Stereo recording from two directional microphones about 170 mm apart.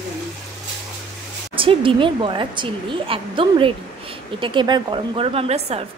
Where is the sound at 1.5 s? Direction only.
30° right (ahead or behind).